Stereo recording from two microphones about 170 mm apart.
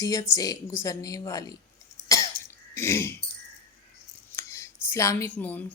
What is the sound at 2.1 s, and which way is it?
Cough, 20° left (ahead or behind).